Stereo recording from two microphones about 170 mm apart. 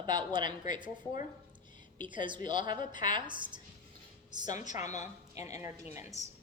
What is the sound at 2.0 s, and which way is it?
A woman's voice, 30° right (ahead or behind).